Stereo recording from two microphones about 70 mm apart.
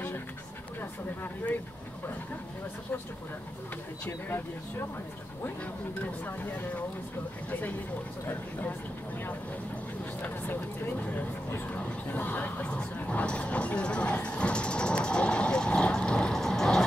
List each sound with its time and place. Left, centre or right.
0.7 s speech: left
4.0 s speech: left
6.2 s speech: left
8.3 s speech: left
10.2 s speech: left; by 16.8 s centre